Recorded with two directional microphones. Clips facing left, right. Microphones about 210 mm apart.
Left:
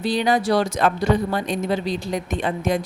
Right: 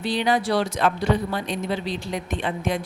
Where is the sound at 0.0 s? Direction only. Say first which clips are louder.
Left 2 dB; 40° left (ahead or behind).